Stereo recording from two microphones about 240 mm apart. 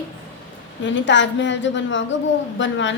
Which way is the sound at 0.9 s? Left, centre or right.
Left.